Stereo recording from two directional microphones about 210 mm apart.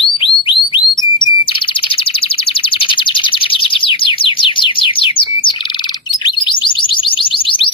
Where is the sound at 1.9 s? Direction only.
25° left (ahead or behind).